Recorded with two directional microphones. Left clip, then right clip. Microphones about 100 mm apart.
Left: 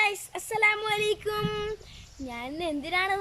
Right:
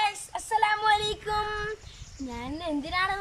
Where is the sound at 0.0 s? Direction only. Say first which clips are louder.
Left 1 dB; 25° left (ahead or behind).